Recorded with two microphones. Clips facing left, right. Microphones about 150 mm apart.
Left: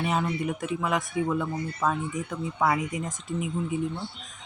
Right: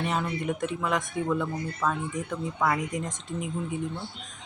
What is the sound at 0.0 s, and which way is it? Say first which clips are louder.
Speech: left 2 dB; 5° left (ahead or behind).